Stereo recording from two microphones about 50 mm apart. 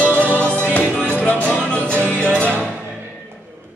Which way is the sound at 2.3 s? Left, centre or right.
Right.